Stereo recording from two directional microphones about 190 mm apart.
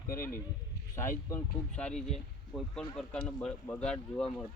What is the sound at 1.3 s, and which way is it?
Speech, 10° left (ahead or behind).